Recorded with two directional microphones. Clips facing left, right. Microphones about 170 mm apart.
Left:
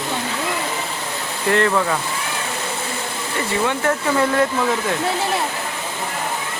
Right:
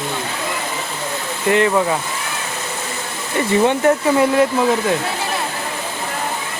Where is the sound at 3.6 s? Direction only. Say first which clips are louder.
Right 6 dB; 25° right (ahead or behind).